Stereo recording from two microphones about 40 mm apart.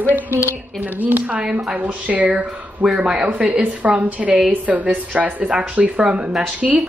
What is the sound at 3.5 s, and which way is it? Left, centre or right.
Speech, right.